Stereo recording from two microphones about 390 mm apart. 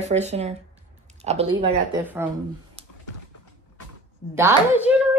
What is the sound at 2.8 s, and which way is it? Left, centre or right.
Typing, centre.